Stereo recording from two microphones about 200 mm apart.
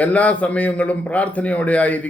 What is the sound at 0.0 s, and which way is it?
Speech, 5° left (ahead or behind).